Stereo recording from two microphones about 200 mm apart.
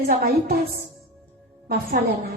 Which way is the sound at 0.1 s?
50° right (ahead or behind).